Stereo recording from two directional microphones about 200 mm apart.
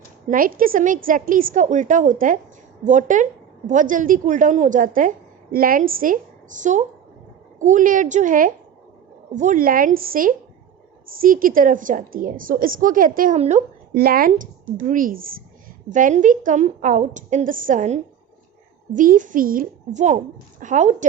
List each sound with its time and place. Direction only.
0.3 s a woman's voice: 45° right (ahead or behind)
13.9 s a woman's voice: 50° right (ahead or behind)